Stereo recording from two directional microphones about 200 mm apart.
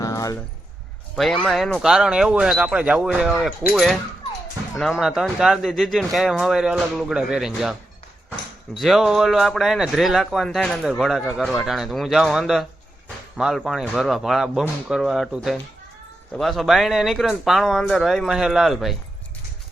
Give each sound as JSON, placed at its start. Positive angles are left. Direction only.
{"t": 0.0, "sound": "keys jangling", "side_deg": 15}
{"t": 1.1, "sound": "speech", "side_deg": 0}